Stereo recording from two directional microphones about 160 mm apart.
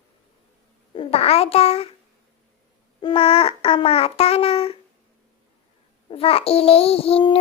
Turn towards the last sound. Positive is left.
turn(degrees=35)  # may be behind; listen again after turning